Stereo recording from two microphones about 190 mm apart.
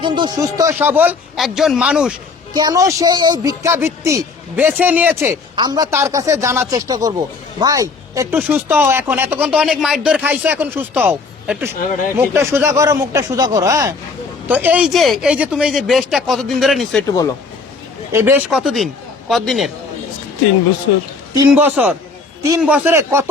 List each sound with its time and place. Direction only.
0.0 s speech: 25° right (ahead or behind); by 2.1 s 5° right (ahead or behind)
2.5 s speech: 20° right (ahead or behind); by 17.0 s centre (ahead or behind)
18.1 s speech: 10° right (ahead or behind)
21.3 s speech: 10° right (ahead or behind)